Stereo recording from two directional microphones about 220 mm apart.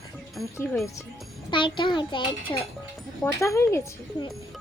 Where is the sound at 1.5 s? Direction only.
20° left (ahead or behind).